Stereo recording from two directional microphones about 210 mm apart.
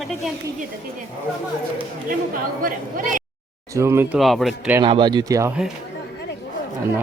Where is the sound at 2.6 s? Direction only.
40° right (ahead or behind).